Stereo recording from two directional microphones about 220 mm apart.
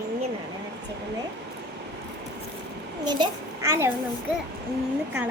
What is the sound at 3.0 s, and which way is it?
Speech, 20° right (ahead or behind).